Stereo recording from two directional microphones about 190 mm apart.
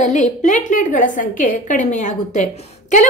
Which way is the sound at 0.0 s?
40° left (ahead or behind).